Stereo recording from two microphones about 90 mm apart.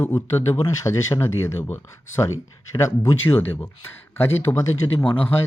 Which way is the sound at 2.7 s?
45° left (ahead or behind).